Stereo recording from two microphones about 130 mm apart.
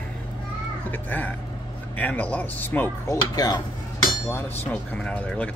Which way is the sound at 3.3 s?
30° left (ahead or behind).